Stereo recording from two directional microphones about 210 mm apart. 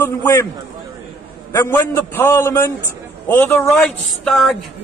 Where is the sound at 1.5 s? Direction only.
10° left (ahead or behind).